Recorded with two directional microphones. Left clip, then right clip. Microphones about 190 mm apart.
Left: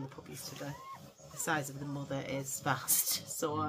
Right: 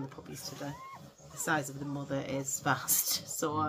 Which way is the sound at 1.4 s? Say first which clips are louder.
Right 3 dB; 10° right (ahead or behind).